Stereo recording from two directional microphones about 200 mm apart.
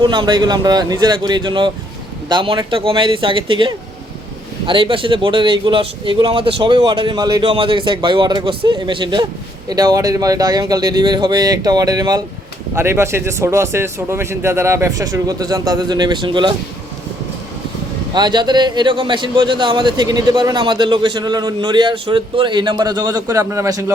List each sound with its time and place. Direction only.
0.0 s speech: 20° right (ahead or behind)
18.1 s speech: 20° right (ahead or behind)